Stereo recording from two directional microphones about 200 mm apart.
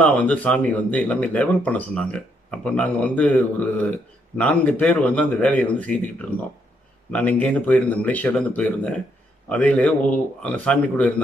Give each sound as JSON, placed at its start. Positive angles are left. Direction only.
{"t": 0.0, "sound": "speech", "side_deg": 5}
{"t": 6.3, "sound": "speech", "side_deg": 90}
{"t": 7.1, "sound": "speech", "side_deg": 5}